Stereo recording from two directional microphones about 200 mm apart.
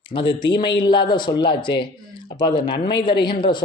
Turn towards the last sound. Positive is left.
turn(degrees=25)  # may be behind; listen again after turning